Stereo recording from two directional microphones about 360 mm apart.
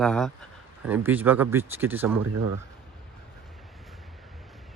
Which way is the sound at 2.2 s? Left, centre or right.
Right.